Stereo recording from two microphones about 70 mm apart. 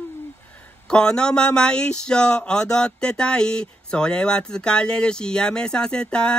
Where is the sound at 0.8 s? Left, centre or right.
Centre.